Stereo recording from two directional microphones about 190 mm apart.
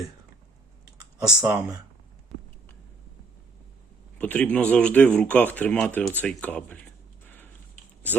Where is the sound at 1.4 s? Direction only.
15° right (ahead or behind).